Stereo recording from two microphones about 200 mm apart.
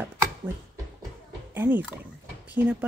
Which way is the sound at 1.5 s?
10° right (ahead or behind).